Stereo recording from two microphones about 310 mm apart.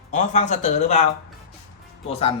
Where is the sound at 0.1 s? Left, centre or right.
Left.